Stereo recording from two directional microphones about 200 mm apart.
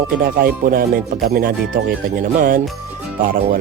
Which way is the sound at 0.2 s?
45° right (ahead or behind).